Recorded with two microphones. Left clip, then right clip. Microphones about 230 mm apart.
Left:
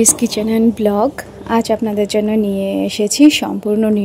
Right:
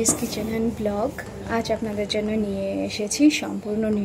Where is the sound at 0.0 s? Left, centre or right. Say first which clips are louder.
Left 9 dB; left.